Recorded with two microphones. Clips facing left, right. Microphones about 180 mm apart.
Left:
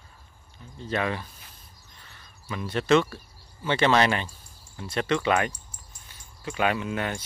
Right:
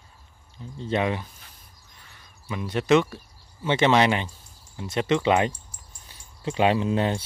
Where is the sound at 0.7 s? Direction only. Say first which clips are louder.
Right 3 dB; 25° right (ahead or behind).